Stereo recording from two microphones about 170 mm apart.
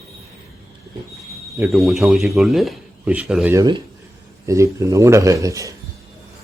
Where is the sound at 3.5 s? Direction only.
25° right (ahead or behind).